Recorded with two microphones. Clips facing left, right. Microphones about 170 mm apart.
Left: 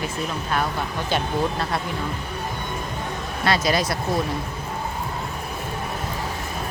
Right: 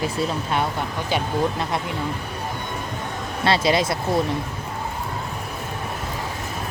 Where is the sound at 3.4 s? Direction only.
25° right (ahead or behind).